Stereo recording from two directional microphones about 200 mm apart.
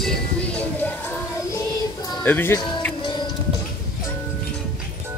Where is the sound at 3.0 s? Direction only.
25° left (ahead or behind).